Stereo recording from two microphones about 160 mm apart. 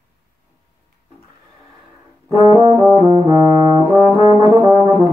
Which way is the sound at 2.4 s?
20° right (ahead or behind).